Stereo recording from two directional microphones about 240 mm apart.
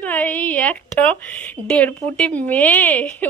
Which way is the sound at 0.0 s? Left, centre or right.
Centre.